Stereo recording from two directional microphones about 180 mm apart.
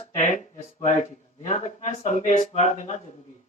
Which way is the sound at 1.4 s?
40° left (ahead or behind).